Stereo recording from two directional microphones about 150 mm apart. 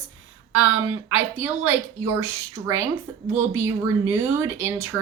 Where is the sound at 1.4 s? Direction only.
15° right (ahead or behind).